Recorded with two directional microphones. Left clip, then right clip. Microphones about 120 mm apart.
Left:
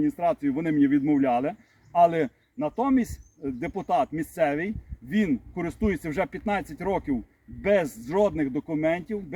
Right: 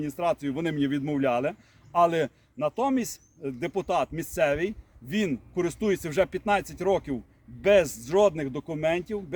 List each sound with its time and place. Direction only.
0.0 s speech: 30° right (ahead or behind)